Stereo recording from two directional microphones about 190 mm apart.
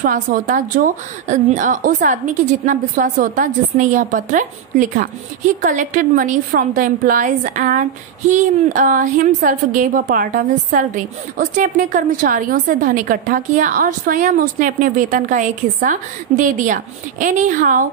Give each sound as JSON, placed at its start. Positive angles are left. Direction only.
{"t": 0.0, "sound": "a woman's voice", "side_deg": -45}